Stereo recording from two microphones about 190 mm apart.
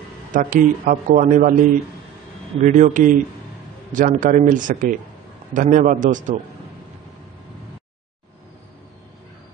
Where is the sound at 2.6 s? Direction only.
40° right (ahead or behind).